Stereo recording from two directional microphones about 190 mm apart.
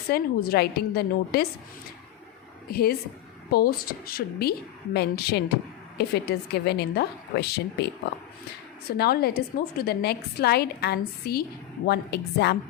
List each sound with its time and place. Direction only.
0.1 s a woman's voice: 55° left (ahead or behind)
3.5 s a woman's voice: 50° left (ahead or behind)
9.0 s a woman's voice: 55° left (ahead or behind)